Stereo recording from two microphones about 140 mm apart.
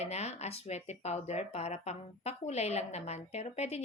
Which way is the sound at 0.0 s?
50° left (ahead or behind).